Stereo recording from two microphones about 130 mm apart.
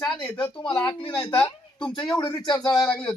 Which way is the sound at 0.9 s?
35° left (ahead or behind).